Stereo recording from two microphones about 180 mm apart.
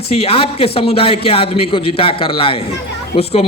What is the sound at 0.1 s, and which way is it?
A man's voice, 35° left (ahead or behind).